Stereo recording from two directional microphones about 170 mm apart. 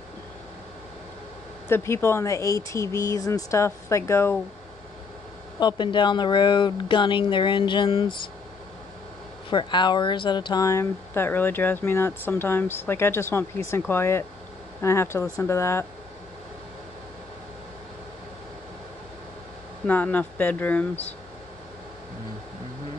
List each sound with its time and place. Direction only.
1.7 s speech: 15° left (ahead or behind)
5.6 s speech: 25° left (ahead or behind)
9.5 s speech: 25° left (ahead or behind)
19.9 s speech: 10° left (ahead or behind)